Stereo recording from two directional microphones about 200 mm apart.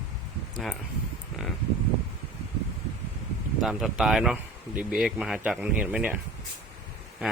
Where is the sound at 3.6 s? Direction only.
Centre (ahead or behind).